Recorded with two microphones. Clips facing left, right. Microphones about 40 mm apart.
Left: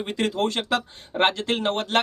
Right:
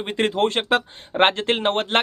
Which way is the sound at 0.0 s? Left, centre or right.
Right.